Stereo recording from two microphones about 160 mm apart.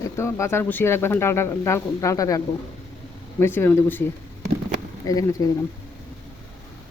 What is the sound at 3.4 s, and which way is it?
Speech, 15° left (ahead or behind).